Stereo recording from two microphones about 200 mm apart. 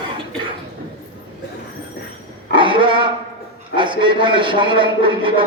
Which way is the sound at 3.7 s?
25° right (ahead or behind).